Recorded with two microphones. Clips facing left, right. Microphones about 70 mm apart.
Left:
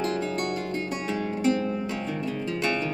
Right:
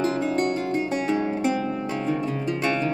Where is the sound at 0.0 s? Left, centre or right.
Right.